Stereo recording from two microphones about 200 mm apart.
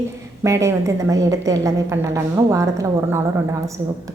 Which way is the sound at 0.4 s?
15° right (ahead or behind).